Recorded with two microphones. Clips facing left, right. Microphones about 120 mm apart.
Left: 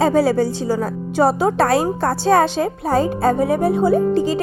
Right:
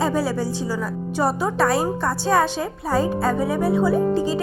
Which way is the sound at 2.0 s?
70° left (ahead or behind).